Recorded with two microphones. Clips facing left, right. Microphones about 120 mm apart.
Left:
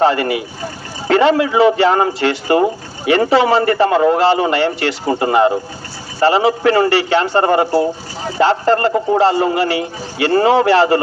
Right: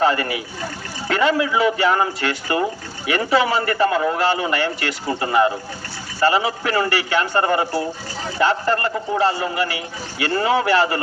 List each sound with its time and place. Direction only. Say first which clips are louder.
0.0 s a man's voice: left 5 dB; 30° left (ahead or behind)